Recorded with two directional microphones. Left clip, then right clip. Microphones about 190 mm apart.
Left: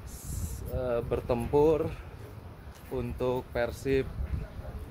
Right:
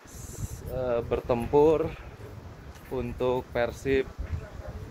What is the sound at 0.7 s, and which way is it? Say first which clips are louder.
Speech: right 3 dB; 10° left (ahead or behind).